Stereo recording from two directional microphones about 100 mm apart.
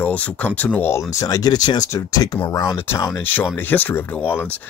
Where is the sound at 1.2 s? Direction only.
40° left (ahead or behind).